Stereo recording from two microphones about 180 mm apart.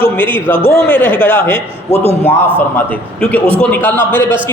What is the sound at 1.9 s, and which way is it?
Speech, 35° left (ahead or behind).